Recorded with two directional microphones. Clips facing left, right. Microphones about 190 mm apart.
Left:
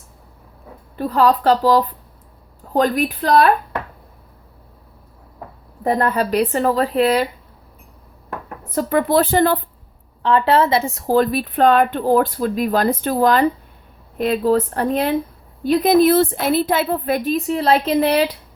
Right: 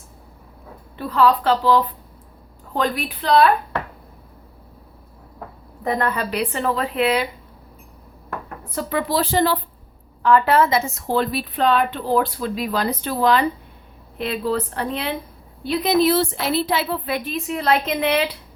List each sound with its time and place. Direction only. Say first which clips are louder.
0.9 s a woman's voice: left 2 dB; 40° left (ahead or behind)
5.8 s speech: left 4 dB; 35° left (ahead or behind)
8.7 s a woman's voice: left 6 dB; 45° left (ahead or behind)
10.2 s a woman's voice: left 1 dB; 30° left (ahead or behind)